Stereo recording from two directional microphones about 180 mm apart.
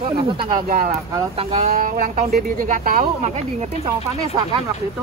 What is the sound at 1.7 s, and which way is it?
Speech, 50° right (ahead or behind).